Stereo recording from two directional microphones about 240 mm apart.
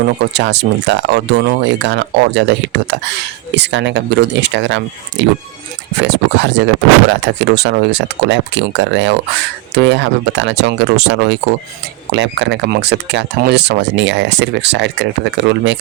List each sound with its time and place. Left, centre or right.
0.2 s speech: right